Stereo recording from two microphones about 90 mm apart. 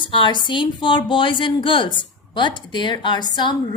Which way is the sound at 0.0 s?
65° left (ahead or behind).